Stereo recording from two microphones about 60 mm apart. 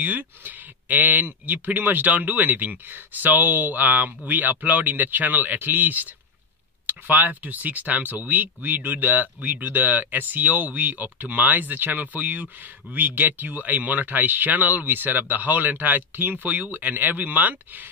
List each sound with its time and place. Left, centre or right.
0.0 s speech: right